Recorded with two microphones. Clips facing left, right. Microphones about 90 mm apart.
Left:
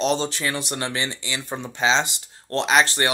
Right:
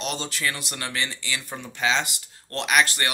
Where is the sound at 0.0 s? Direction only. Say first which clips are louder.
Left 6 dB; 30° left (ahead or behind).